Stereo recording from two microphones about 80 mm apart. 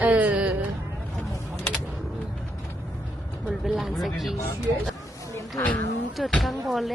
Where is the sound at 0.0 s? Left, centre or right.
Centre.